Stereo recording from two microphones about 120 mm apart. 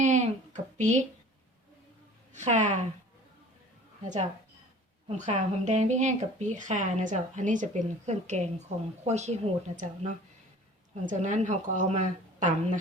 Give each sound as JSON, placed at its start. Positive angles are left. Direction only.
{"t": 0.0, "sound": "a sound", "side_deg": -80}
{"t": 2.3, "sound": "speech", "side_deg": -85}
{"t": 5.0, "sound": "speech", "side_deg": -75}
{"t": 11.0, "sound": "a woman's voice", "side_deg": -90}